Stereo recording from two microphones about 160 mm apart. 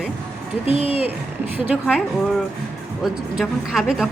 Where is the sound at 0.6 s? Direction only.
35° left (ahead or behind).